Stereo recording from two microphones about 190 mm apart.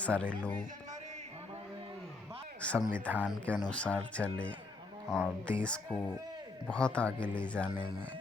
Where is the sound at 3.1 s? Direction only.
10° right (ahead or behind).